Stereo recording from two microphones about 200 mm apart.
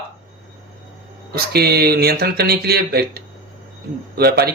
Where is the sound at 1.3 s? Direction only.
50° right (ahead or behind).